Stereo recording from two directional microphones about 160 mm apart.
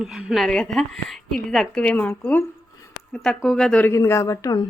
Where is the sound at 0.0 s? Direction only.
5° right (ahead or behind).